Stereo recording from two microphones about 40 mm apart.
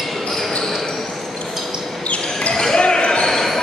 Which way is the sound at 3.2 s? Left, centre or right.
Centre.